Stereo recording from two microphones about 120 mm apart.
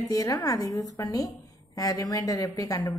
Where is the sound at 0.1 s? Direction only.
30° left (ahead or behind).